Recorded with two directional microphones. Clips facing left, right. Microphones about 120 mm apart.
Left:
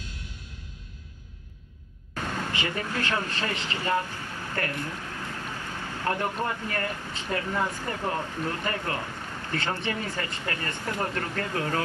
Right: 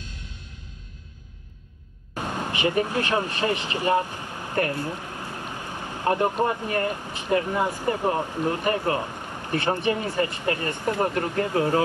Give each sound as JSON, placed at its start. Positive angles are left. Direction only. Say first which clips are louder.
{"t": 2.1, "sound": "speech", "louder": "right 2 dB", "side_deg": -15}